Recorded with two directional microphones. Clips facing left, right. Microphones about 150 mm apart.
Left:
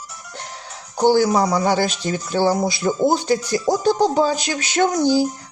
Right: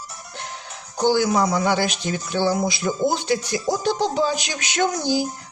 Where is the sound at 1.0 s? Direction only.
40° left (ahead or behind).